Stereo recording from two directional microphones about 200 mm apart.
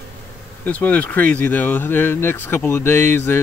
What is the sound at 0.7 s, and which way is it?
Speech, 5° left (ahead or behind).